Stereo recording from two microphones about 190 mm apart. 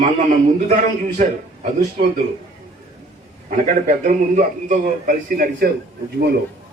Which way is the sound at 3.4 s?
40° right (ahead or behind).